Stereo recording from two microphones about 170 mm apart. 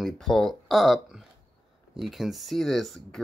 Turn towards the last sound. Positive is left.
turn(degrees=0)  # may be behind; listen again after turning